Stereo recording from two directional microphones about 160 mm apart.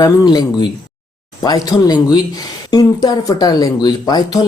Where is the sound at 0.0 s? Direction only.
25° left (ahead or behind).